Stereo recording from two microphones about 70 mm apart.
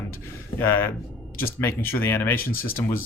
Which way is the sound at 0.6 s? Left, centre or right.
Left.